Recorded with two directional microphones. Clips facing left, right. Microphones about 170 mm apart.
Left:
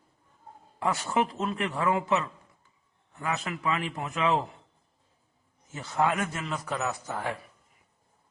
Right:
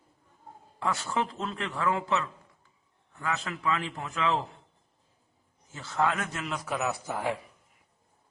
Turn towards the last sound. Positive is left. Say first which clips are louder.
# right 2 dB
turn(degrees=-10)  # may be behind; listen again after turning